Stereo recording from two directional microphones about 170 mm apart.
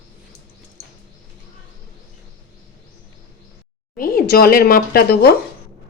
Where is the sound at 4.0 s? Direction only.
60° left (ahead or behind).